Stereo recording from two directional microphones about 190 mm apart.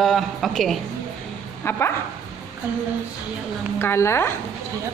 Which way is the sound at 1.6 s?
10° left (ahead or behind).